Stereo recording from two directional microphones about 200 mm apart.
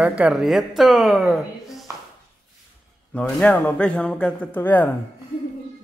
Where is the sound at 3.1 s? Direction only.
5° left (ahead or behind).